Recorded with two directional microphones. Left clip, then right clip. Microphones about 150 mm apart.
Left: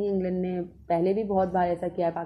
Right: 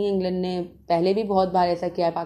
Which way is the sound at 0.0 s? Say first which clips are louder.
Right 4 dB; 20° right (ahead or behind).